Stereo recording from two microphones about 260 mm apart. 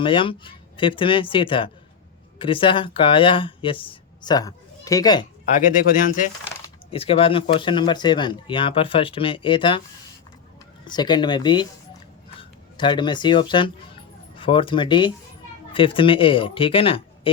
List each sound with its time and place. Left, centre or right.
0.0 s speech: centre
5.5 s speech: left
10.8 s speech: centre